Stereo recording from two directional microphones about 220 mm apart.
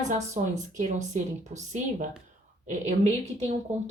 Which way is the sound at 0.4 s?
30° right (ahead or behind).